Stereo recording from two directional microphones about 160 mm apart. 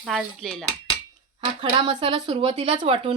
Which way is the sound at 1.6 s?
30° right (ahead or behind).